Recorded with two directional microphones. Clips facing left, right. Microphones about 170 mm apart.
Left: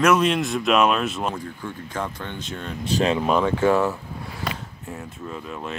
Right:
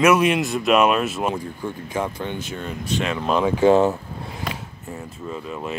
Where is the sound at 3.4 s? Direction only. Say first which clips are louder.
Right 4 dB; 20° right (ahead or behind).